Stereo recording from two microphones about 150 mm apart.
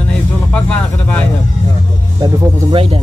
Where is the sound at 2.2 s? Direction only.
30° right (ahead or behind).